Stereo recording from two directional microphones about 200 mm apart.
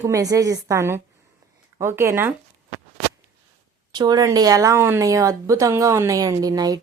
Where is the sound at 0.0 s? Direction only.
15° right (ahead or behind).